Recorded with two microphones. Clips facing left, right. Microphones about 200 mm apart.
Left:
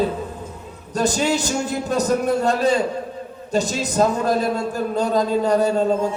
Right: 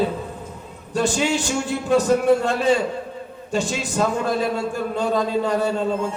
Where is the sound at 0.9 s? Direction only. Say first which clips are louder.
Left 1 dB; 40° left (ahead or behind).